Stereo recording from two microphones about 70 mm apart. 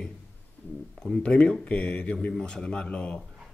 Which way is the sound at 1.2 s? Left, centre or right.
Centre.